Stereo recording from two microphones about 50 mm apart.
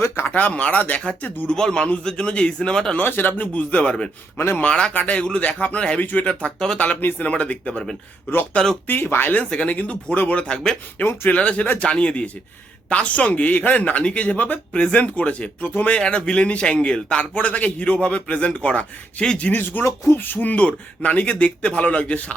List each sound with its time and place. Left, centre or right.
0.3 s a man's voice: left
1.5 s a man's voice: centre
3.0 s a man's voice: left
6.0 s speech: left
6.4 s a man's voice: centre
6.7 s a man's voice: left
8.9 s speech: left
9.4 s a man's voice: centre
9.6 s a man's voice: left
10.9 s speech: left
11.3 s a man's voice: left
19.5 s speech: left
19.8 s speech: left
20.2 s a man's voice: left